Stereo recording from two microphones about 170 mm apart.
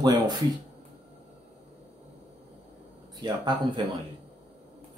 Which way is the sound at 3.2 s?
25° right (ahead or behind).